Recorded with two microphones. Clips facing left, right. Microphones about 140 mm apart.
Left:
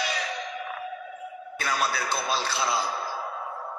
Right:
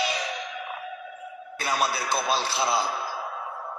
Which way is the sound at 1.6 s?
30° right (ahead or behind).